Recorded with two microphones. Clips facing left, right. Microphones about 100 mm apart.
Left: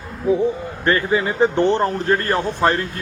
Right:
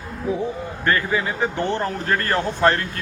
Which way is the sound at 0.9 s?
25° left (ahead or behind).